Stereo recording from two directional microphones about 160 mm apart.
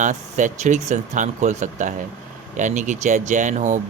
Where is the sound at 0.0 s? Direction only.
50° right (ahead or behind).